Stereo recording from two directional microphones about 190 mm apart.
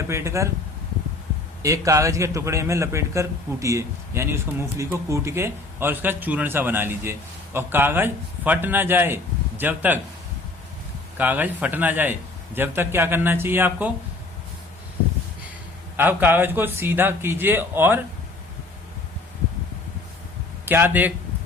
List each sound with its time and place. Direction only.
0.1 s a man's voice: 15° right (ahead or behind)
1.6 s a man's voice: 15° right (ahead or behind)
11.2 s a man's voice: 10° right (ahead or behind)
16.0 s a man's voice: 10° right (ahead or behind)
20.7 s a man's voice: 10° right (ahead or behind)